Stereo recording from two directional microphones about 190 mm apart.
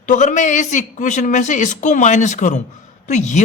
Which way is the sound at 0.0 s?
40° left (ahead or behind).